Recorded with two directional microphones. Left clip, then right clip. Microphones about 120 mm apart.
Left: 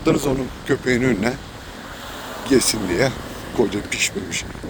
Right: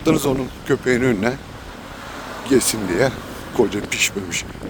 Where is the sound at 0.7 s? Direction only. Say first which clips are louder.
Right 1 dB; 55° right (ahead or behind).